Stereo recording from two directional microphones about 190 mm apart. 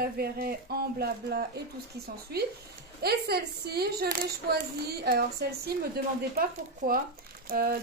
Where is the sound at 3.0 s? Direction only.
55° right (ahead or behind).